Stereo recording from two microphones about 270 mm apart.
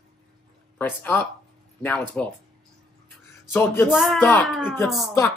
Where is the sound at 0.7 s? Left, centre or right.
Centre.